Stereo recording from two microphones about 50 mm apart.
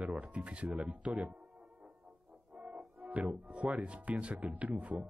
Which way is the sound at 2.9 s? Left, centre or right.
Right.